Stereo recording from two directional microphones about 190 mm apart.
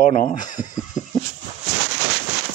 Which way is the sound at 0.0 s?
45° left (ahead or behind).